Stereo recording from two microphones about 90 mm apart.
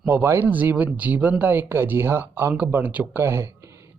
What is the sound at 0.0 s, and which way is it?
Speech, 20° right (ahead or behind).